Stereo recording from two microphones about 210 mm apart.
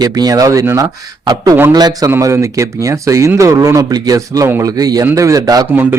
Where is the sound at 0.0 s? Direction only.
15° right (ahead or behind).